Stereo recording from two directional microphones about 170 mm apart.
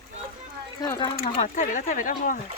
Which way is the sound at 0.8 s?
20° left (ahead or behind).